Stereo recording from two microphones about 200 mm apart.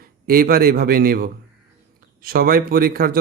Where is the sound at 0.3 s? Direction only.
45° right (ahead or behind).